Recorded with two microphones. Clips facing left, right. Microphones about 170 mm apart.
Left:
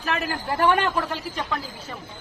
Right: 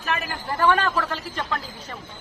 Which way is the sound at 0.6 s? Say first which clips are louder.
Even; 20° left (ahead or behind).